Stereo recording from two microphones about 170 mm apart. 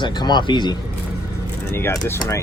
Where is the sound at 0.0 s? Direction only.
25° left (ahead or behind).